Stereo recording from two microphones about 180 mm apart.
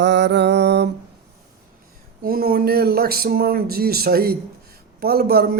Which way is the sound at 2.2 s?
55° right (ahead or behind).